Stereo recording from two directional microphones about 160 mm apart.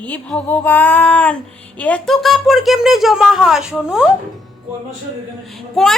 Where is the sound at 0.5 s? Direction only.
10° left (ahead or behind); by 4.1 s 5° right (ahead or behind).